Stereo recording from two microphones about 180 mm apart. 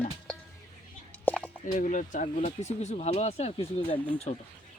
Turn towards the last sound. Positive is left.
turn(degrees=35)  # may be behind; listen again after turning